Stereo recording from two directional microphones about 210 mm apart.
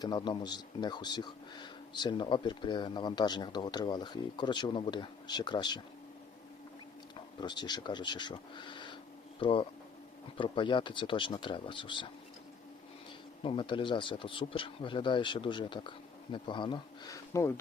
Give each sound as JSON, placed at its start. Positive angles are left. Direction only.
{"t": 0.0, "sound": "speech", "side_deg": 20}
{"t": 7.4, "sound": "speech", "side_deg": 20}
{"t": 13.4, "sound": "speech", "side_deg": 25}